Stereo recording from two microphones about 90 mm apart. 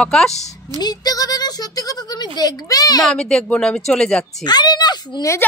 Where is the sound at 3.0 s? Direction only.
5° left (ahead or behind).